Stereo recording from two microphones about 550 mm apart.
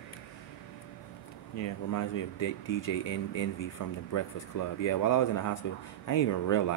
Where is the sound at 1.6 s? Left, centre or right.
Left.